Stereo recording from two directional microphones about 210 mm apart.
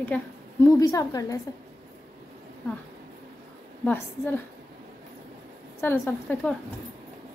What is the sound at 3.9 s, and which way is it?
Speech, 10° left (ahead or behind).